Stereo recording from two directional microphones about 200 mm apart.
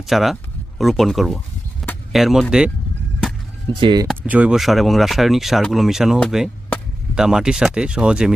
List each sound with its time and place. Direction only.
0.0 s speech: centre (ahead or behind)
1.8 s a sound: centre (ahead or behind)
2.1 s speech: centre (ahead or behind)
3.7 s speech: 25° right (ahead or behind)
4.1 s speech: 5° right (ahead or behind)